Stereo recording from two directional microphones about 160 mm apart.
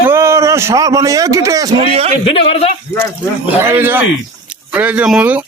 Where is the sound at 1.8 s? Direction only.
40° right (ahead or behind).